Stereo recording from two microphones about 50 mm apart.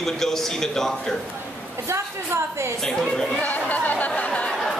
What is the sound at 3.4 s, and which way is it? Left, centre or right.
Chatter, left.